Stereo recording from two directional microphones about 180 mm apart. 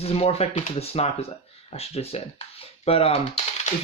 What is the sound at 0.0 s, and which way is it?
Speech, 35° left (ahead or behind).